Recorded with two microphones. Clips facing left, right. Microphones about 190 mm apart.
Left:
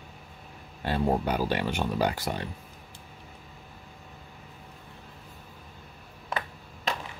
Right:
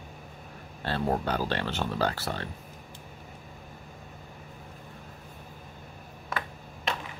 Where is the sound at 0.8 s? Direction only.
10° left (ahead or behind).